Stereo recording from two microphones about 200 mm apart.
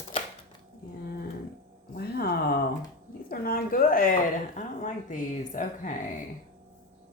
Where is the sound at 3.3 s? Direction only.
45° left (ahead or behind).